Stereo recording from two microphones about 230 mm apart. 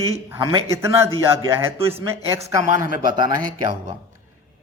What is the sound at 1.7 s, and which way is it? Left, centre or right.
Speech, right.